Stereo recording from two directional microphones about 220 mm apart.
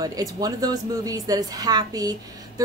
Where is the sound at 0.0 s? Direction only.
15° right (ahead or behind).